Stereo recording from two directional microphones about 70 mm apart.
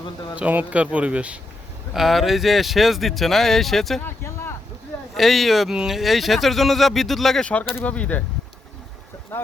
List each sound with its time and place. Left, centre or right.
0.3 s speech: right
1.9 s speech: centre
4.0 s a sound: left
5.1 s speech: centre
7.9 s speech: centre
9.3 s speech: left